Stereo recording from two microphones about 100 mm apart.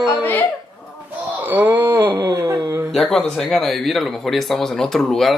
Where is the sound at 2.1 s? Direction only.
35° right (ahead or behind).